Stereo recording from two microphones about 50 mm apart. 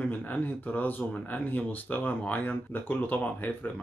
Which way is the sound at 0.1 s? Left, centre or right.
Left.